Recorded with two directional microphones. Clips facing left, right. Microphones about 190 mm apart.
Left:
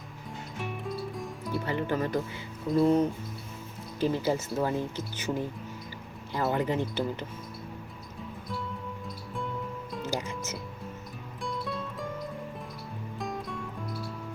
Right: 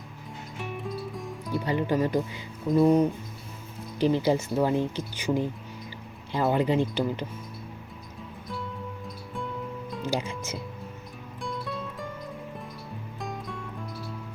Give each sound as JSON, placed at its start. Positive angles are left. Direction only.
{"t": 0.6, "sound": "music", "side_deg": 0}
{"t": 1.5, "sound": "speech", "side_deg": -15}
{"t": 10.0, "sound": "speech", "side_deg": -15}
{"t": 11.4, "sound": "music", "side_deg": 0}
{"t": 13.1, "sound": "music", "side_deg": 0}